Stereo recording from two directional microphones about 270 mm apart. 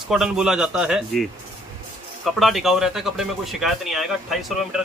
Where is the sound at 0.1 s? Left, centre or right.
Centre.